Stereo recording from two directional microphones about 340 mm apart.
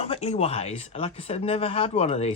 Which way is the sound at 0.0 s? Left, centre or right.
Centre.